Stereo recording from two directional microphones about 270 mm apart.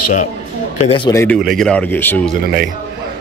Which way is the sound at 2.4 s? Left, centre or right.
Right.